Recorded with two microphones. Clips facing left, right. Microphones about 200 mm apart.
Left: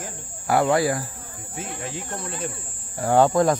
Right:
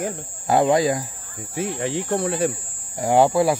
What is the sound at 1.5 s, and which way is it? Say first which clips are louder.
Speech: right 9 dB; 70° right (ahead or behind).